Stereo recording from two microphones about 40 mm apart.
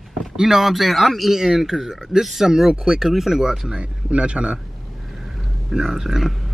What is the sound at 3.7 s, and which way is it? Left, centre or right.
Speech, right.